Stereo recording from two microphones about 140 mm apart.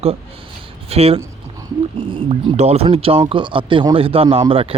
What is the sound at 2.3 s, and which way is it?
Speech, 50° right (ahead or behind).